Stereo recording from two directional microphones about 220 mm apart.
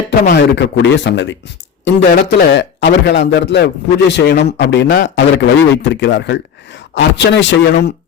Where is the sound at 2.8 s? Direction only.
50° left (ahead or behind).